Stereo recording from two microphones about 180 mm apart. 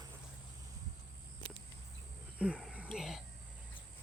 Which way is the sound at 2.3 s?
5° right (ahead or behind).